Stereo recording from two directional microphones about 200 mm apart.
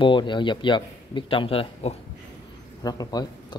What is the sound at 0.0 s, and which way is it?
Speech, 25° left (ahead or behind).